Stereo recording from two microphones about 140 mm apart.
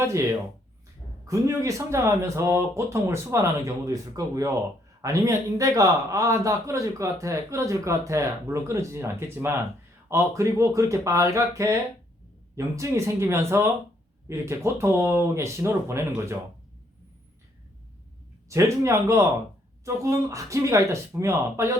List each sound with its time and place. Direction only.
1.3 s a man's voice: 20° right (ahead or behind)
18.4 s a man's voice: 20° right (ahead or behind)